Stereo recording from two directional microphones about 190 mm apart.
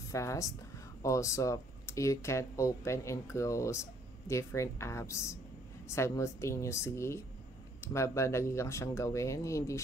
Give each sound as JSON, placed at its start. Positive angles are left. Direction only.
{"t": 0.1, "sound": "speech", "side_deg": 15}